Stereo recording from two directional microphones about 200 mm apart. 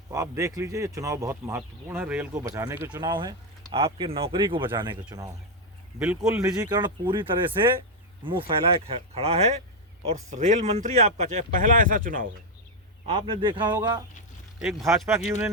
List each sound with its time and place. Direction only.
0.1 s speech: 15° right (ahead or behind)
6.0 s speech: 5° right (ahead or behind)
6.6 s speech: 20° right (ahead or behind)
8.2 s speech: 25° right (ahead or behind); by 12.3 s 45° right (ahead or behind)
13.1 s speech: 25° right (ahead or behind)
14.6 s speech: centre (ahead or behind)